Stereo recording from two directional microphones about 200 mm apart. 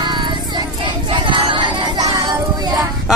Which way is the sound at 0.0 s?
20° right (ahead or behind).